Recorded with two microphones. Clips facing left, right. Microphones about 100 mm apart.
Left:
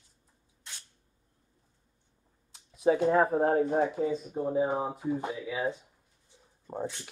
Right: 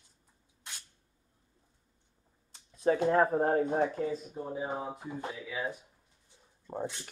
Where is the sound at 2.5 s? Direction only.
10° left (ahead or behind).